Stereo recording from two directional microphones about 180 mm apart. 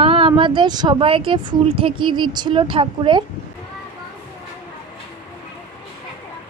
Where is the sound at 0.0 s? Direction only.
30° right (ahead or behind).